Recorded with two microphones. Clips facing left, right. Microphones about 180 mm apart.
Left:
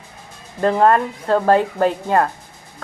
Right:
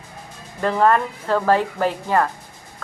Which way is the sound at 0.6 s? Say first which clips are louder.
Left 3 dB; 30° left (ahead or behind).